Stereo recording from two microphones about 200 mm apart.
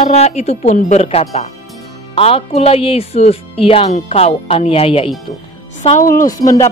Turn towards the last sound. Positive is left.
turn(degrees=20)  # may be behind; listen again after turning